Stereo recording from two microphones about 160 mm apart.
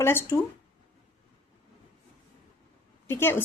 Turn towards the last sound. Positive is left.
turn(degrees=15)  # may be behind; listen again after turning